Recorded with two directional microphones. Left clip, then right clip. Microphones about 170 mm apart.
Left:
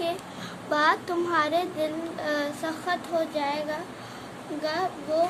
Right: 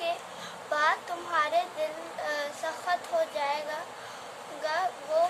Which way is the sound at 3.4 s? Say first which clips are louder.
Left 2 dB; 15° left (ahead or behind).